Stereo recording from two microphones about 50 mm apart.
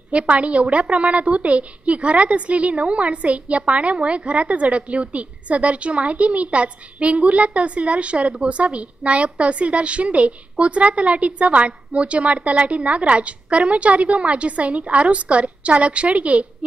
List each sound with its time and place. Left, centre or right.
0.1 s a woman's voice: right